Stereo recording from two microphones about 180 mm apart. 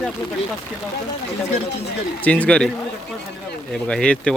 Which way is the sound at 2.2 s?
10° left (ahead or behind).